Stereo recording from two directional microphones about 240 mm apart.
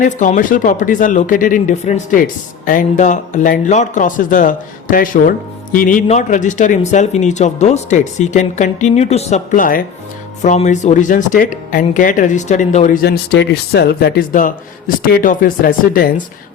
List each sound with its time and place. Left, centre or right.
0.0 s speech: left